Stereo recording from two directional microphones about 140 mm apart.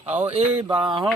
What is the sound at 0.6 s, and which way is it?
Speech, 40° right (ahead or behind).